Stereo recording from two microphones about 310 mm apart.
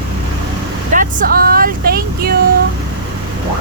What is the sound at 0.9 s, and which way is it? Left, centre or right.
Speech, right.